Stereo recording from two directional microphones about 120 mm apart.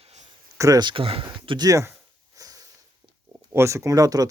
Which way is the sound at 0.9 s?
50° right (ahead or behind).